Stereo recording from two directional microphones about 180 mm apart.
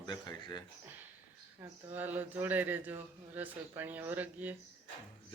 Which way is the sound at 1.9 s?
10° right (ahead or behind).